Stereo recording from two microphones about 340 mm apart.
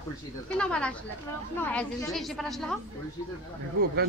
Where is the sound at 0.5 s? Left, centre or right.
Centre.